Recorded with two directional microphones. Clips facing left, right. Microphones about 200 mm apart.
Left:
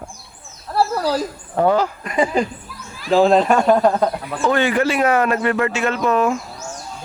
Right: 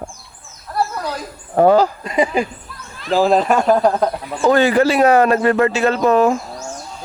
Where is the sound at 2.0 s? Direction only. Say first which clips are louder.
Right 2 dB; 20° right (ahead or behind).